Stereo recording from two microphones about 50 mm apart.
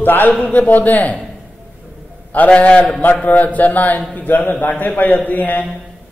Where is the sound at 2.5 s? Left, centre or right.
Left.